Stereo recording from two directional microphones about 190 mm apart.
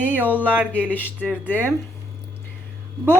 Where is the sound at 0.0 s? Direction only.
10° right (ahead or behind).